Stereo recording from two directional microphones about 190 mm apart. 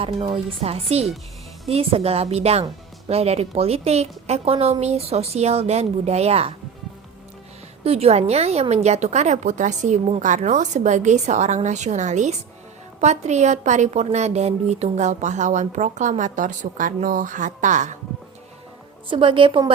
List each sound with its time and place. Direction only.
0.0 s a woman's voice: 30° right (ahead or behind)
7.9 s a woman's voice: 35° right (ahead or behind)
19.0 s a woman's voice: 25° right (ahead or behind)